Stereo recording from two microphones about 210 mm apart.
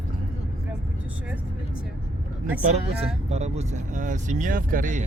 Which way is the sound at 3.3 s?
30° right (ahead or behind).